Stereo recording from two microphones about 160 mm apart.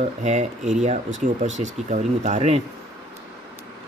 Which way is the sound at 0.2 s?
45° right (ahead or behind).